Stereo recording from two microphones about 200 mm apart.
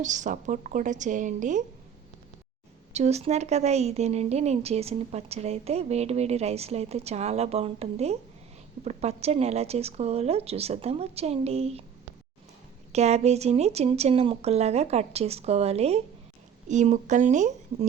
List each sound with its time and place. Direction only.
0.0 s a woman's voice: 40° right (ahead or behind)
2.9 s a woman's voice: 35° right (ahead or behind)
12.9 s a woman's voice: 35° right (ahead or behind)